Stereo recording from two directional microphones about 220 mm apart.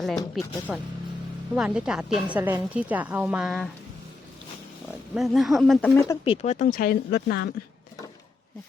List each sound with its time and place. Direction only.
0.0 s a woman's voice: centre (ahead or behind)
5.1 s a woman's voice: centre (ahead or behind)
5.9 s speech: 10° left (ahead or behind)
6.2 s speech: 25° left (ahead or behind); by 7.5 s 50° left (ahead or behind)